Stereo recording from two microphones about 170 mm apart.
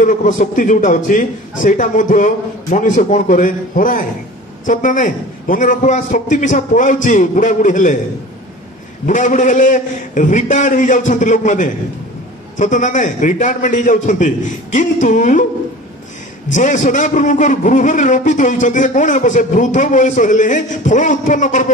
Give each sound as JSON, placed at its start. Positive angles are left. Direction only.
{"t": 0.0, "sound": "a man's voice", "side_deg": 50}
{"t": 9.0, "sound": "a man's voice", "side_deg": 50}
{"t": 16.4, "sound": "a man's voice", "side_deg": 45}